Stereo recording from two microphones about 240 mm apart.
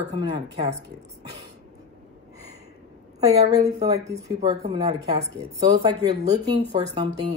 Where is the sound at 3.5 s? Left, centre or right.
Centre.